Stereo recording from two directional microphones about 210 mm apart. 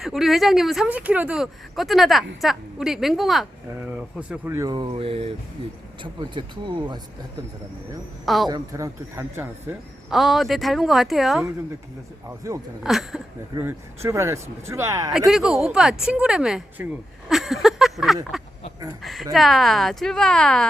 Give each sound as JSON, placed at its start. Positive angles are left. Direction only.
{"t": 0.0, "sound": "speech", "side_deg": 0}
{"t": 8.2, "sound": "speech", "side_deg": 0}
{"t": 8.4, "sound": "speech", "side_deg": -15}
{"t": 10.1, "sound": "speech", "side_deg": 0}
{"t": 12.8, "sound": "speech", "side_deg": 0}
{"t": 13.6, "sound": "speech", "side_deg": -10}
{"t": 15.3, "sound": "speech", "side_deg": 0}
{"t": 17.2, "sound": "a sound", "side_deg": 0}
{"t": 19.0, "sound": "speech", "side_deg": 0}